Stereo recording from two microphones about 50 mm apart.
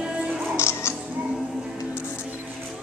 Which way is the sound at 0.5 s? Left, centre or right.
Left.